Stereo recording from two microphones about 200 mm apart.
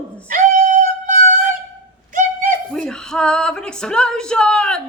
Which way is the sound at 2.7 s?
5° left (ahead or behind).